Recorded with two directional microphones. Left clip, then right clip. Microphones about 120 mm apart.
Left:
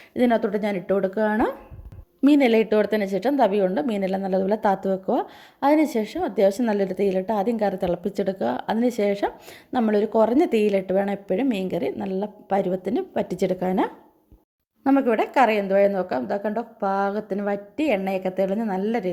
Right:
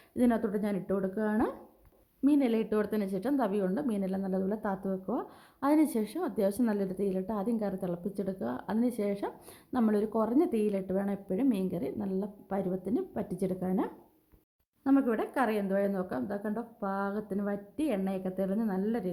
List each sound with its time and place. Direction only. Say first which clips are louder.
0.2 s a woman's voice: left 9 dB; 20° left (ahead or behind)
2.4 s a woman's voice: left 11 dB; 30° left (ahead or behind)